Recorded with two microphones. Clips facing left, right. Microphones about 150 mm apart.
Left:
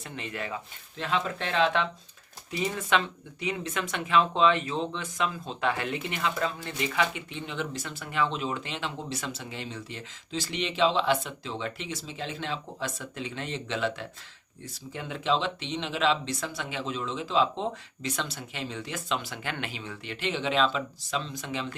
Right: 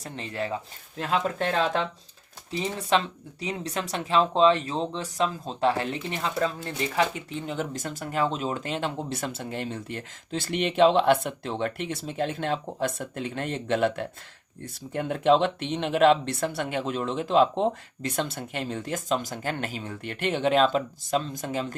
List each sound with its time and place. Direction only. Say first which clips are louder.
0.0 s speech: right 4 dB; 35° right (ahead or behind)